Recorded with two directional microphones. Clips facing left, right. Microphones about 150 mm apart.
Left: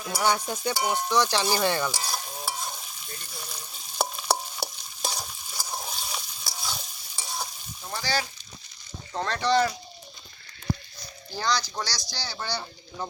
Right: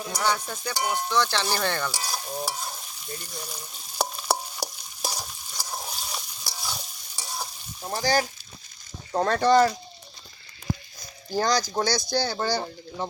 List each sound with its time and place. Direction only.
0.1 s speech: 10° left (ahead or behind)
2.0 s stir: 5° right (ahead or behind)
8.0 s speech: 45° right (ahead or behind)
11.3 s speech: 45° right (ahead or behind)